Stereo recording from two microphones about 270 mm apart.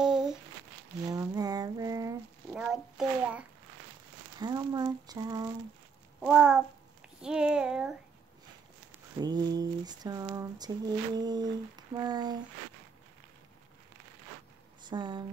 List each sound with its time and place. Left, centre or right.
0.0 s a sound: centre
1.0 s a sound: centre
4.4 s speech: centre
6.2 s a child's voice: centre
9.2 s speech: centre
14.9 s speech: centre